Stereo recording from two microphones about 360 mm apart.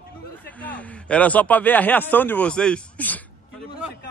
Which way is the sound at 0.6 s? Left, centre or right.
Centre.